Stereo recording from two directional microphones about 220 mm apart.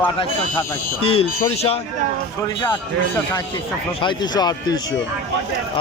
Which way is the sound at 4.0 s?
20° left (ahead or behind).